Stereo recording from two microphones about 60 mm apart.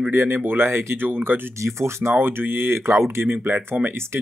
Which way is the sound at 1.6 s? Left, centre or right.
Right.